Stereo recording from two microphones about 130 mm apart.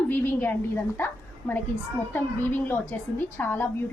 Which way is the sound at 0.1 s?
15° left (ahead or behind).